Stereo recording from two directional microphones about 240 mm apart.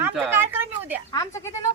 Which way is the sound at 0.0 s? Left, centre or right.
Centre.